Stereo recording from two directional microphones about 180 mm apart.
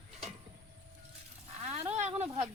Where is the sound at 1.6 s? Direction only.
40° right (ahead or behind).